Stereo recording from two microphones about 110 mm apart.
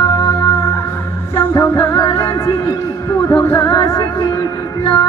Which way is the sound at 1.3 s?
25° left (ahead or behind).